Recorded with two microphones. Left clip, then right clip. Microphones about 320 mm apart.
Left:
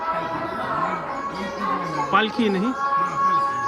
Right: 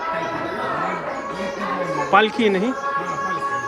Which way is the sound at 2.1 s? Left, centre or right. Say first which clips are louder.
Right 5 dB; centre.